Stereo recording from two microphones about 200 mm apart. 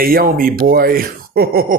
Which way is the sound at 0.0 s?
45° right (ahead or behind).